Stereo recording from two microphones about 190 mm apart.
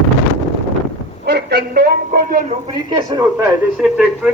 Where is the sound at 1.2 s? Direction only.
60° right (ahead or behind).